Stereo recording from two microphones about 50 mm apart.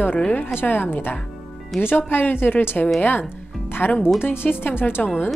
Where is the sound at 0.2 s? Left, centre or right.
Left.